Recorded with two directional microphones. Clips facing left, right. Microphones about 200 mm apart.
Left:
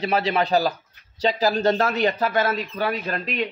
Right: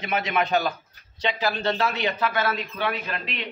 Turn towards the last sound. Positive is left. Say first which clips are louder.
# left 6 dB
turn(degrees=45)  # may be behind; listen again after turning